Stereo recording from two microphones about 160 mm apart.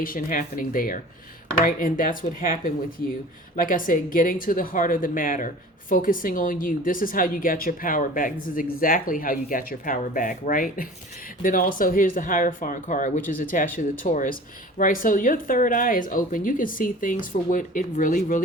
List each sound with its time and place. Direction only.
0.0 s a woman's voice: 60° left (ahead or behind)